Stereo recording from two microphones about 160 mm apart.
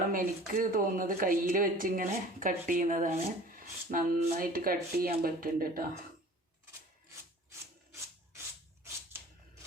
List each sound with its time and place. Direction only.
0.1 s speech: 60° right (ahead or behind)